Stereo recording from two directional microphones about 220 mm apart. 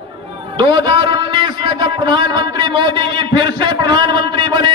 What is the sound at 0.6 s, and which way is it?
A man's voice, 20° right (ahead or behind).